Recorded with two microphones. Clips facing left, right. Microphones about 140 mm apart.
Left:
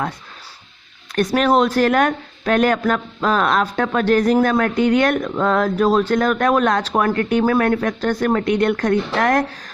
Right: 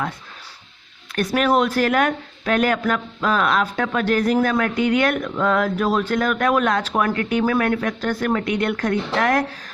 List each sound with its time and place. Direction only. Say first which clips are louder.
1.1 s speech: left 3 dB; 40° left (ahead or behind)